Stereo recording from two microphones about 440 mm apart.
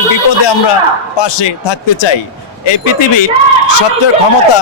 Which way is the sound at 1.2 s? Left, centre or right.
Left.